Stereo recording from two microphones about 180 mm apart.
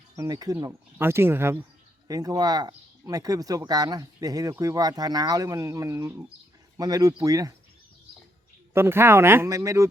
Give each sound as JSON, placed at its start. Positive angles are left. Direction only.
{"t": 0.2, "sound": "speech", "side_deg": -20}
{"t": 8.7, "sound": "speech", "side_deg": -15}